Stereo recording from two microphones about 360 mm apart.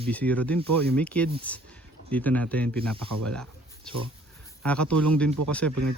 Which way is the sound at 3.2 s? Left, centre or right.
Centre.